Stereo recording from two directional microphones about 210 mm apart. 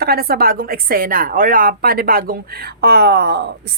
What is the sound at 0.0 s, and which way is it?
A woman's voice, 45° right (ahead or behind).